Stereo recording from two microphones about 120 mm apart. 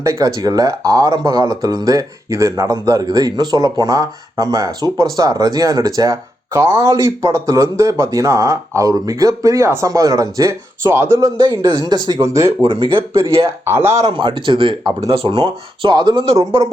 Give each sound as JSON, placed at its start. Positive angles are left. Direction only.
{"t": 0.0, "sound": "speech", "side_deg": -25}
{"t": 11.3, "sound": "speech", "side_deg": -35}
{"t": 12.6, "sound": "speech", "side_deg": -45}
{"t": 13.7, "sound": "speech", "side_deg": -20}
{"t": 14.0, "sound": "speech", "side_deg": -45}